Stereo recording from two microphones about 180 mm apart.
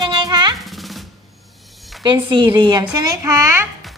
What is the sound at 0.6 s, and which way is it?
Drum roll, centre (ahead or behind).